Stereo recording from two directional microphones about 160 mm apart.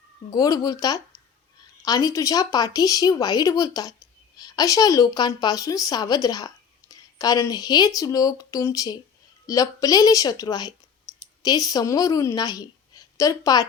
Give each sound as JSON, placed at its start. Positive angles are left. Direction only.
{"t": 0.3, "sound": "a woman's voice", "side_deg": 20}